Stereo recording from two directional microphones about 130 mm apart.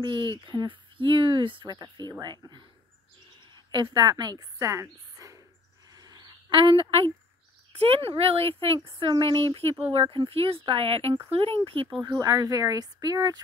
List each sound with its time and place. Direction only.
0.0 s speech: 35° right (ahead or behind)
3.5 s a woman's voice: 35° right (ahead or behind)
5.9 s a sound: 30° right (ahead or behind); by 7.1 s 45° right (ahead or behind)
7.8 s speech: 50° right (ahead or behind)
12.0 s speech: 25° right (ahead or behind)